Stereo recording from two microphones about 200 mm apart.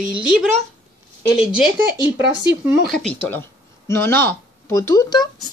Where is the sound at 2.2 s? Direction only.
60° right (ahead or behind).